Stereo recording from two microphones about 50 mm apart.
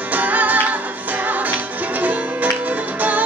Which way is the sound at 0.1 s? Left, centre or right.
Right.